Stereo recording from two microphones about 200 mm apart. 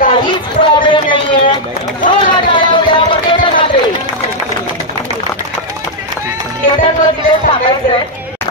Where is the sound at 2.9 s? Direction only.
25° left (ahead or behind).